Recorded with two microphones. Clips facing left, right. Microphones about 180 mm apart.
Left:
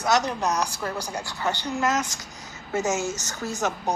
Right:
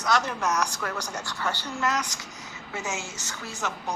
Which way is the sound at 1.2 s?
15° left (ahead or behind).